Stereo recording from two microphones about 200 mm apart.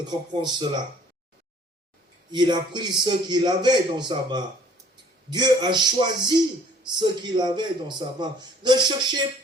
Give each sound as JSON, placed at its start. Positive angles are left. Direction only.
{"t": 0.0, "sound": "a man's voice", "side_deg": -20}
{"t": 2.3, "sound": "a man's voice", "side_deg": -20}